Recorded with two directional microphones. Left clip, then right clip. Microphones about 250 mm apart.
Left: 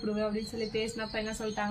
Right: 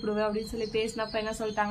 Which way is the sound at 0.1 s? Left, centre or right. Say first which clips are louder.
Right 4 dB; centre.